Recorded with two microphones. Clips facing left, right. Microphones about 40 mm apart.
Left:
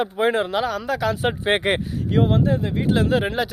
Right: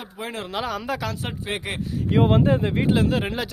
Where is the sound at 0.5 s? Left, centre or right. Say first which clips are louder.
Left 4 dB; centre.